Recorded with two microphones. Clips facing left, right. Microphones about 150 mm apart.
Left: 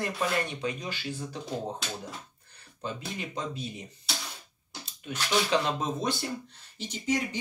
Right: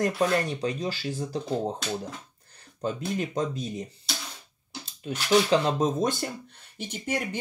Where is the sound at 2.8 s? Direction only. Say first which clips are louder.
Right 7 dB; 45° right (ahead or behind).